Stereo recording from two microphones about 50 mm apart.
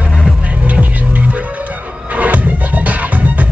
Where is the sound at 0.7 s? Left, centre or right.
Right.